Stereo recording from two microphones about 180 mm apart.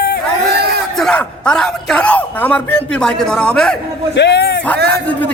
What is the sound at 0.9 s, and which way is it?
A man's voice, 5° left (ahead or behind).